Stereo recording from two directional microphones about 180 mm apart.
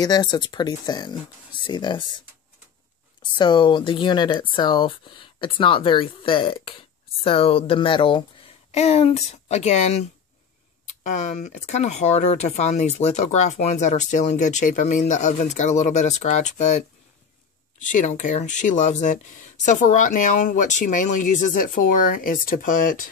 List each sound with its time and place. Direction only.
0.0 s speech: 20° left (ahead or behind); by 16.7 s 40° left (ahead or behind)
17.8 s speech: 45° left (ahead or behind)